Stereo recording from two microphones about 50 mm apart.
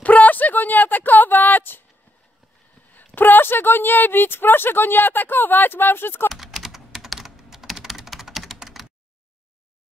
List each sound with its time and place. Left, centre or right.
0.0 s a sound: left
3.2 s speech: left
6.3 s typing: centre